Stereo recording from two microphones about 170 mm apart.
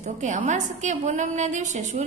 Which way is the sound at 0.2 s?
45° right (ahead or behind).